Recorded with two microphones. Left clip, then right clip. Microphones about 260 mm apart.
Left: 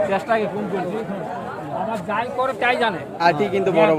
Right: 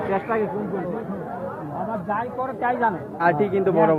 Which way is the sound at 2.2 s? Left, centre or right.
Left.